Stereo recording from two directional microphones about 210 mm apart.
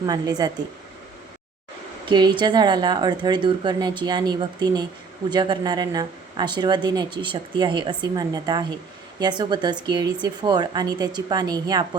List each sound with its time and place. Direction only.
0.0 s speech: 20° right (ahead or behind)
2.0 s speech: 20° right (ahead or behind)